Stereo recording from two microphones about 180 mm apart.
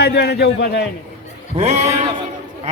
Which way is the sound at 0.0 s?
65° left (ahead or behind).